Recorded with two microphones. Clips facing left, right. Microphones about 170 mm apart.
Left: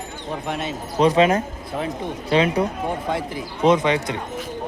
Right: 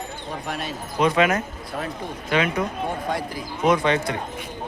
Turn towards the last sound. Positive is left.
turn(degrees=20)  # may be behind; listen again after turning